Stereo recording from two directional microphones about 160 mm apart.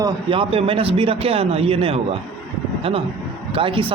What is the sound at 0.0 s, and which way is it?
A man's voice, 30° right (ahead or behind).